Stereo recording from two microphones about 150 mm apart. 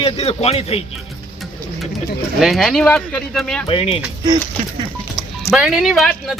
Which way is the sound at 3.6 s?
40° left (ahead or behind).